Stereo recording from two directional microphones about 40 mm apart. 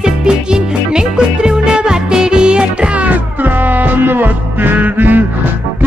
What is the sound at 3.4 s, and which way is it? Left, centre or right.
Music, right.